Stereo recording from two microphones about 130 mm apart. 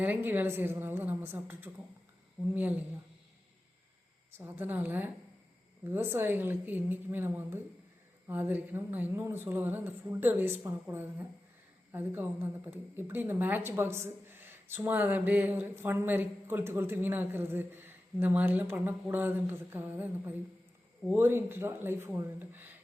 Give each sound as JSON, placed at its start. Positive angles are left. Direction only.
{"t": 0.0, "sound": "a woman's voice", "side_deg": -15}
{"t": 4.4, "sound": "a woman's voice", "side_deg": -15}